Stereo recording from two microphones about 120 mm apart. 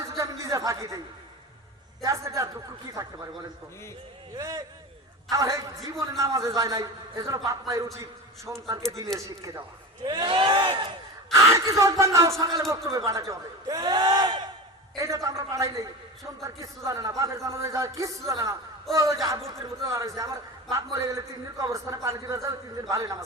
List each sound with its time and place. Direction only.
0.2 s a sound: 25° right (ahead or behind)
2.0 s a man's voice: 25° right (ahead or behind)
4.4 s a man's voice: 25° right (ahead or behind)
9.1 s a man's voice: 5° left (ahead or behind)
10.0 s speech: 35° right (ahead or behind)
11.3 s a man's voice: 25° right (ahead or behind)
14.9 s a man's voice: 25° right (ahead or behind)